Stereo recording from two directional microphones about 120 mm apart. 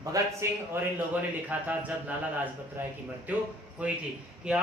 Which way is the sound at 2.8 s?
15° right (ahead or behind).